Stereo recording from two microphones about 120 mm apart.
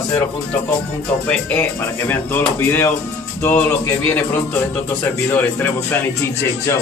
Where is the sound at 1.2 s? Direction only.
15° left (ahead or behind).